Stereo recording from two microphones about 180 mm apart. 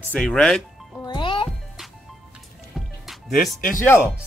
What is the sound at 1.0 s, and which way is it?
Music, 25° left (ahead or behind).